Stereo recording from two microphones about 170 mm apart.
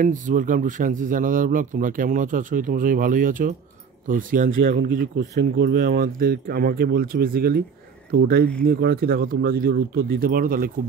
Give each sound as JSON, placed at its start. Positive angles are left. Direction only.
{"t": 0.0, "sound": "speech", "side_deg": -50}